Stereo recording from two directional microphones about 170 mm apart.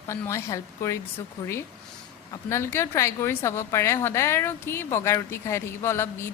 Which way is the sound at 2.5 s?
15° left (ahead or behind).